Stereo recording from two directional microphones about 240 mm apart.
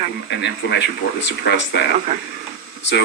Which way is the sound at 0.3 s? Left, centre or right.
Left.